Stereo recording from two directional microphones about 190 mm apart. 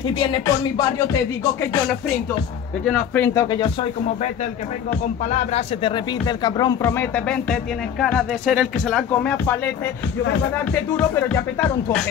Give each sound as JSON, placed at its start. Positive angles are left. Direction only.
{"t": 2.8, "sound": "speech", "side_deg": 5}
{"t": 3.3, "sound": "speech", "side_deg": 20}
{"t": 5.5, "sound": "speech", "side_deg": 30}